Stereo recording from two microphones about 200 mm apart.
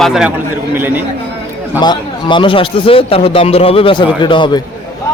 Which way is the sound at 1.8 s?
20° left (ahead or behind).